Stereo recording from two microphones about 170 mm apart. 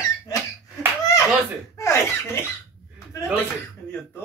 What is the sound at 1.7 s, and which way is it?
Speech, 15° left (ahead or behind).